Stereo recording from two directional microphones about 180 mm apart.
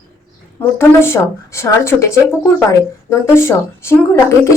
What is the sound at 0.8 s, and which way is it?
A woman's voice, 15° left (ahead or behind).